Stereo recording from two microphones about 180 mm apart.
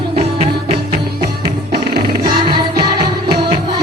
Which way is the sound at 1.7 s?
60° right (ahead or behind).